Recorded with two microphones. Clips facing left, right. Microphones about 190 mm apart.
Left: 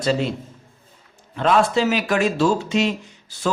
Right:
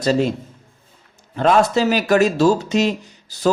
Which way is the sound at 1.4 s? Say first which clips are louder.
Right 2 dB; 40° right (ahead or behind).